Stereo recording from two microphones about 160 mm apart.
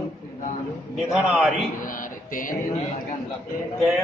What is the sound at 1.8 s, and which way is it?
Mantra, 60° left (ahead or behind).